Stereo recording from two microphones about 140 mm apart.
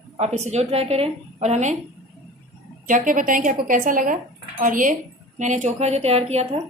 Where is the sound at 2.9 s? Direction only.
70° right (ahead or behind).